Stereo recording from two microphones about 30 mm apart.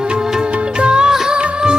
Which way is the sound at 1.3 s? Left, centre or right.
Right.